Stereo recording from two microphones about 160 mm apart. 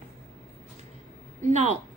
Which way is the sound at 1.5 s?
45° right (ahead or behind).